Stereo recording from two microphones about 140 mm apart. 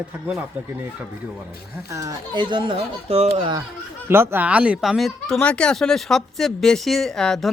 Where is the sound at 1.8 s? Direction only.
25° right (ahead or behind); by 3.5 s 45° right (ahead or behind).